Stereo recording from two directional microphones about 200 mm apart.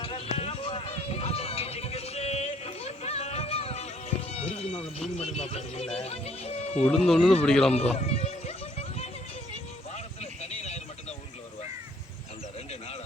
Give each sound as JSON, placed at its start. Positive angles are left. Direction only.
{"t": 0.0, "sound": "run", "side_deg": 30}
{"t": 4.3, "sound": "music", "side_deg": 30}
{"t": 6.8, "sound": "speech", "side_deg": 5}
{"t": 7.8, "sound": "a sound", "side_deg": 30}